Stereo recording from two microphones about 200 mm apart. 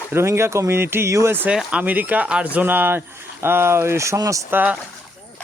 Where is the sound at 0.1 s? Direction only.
10° right (ahead or behind).